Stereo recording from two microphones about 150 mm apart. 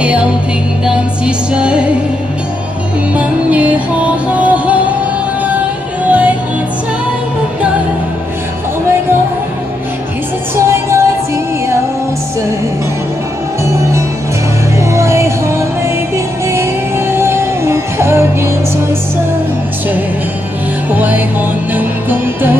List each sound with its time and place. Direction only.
0.0 s music: 10° right (ahead or behind)
3.2 s music: 10° right (ahead or behind)
6.0 s music: 10° right (ahead or behind)
10.5 s music: 15° right (ahead or behind)
14.8 s music: 20° right (ahead or behind)
17.1 s music: 15° right (ahead or behind)
20.9 s music: 10° right (ahead or behind)